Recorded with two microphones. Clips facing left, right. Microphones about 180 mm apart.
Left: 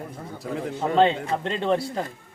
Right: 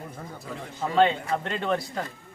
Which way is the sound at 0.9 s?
30° left (ahead or behind).